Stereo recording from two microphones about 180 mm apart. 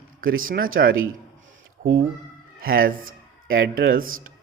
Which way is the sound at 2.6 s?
55° right (ahead or behind).